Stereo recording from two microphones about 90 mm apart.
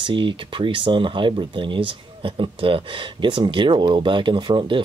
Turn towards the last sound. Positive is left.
turn(degrees=-65)  # may be behind; listen again after turning